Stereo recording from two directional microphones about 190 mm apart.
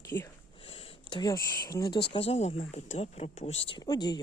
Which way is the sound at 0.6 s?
30° left (ahead or behind).